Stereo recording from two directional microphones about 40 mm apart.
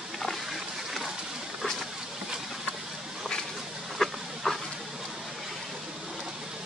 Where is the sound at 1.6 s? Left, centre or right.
Centre.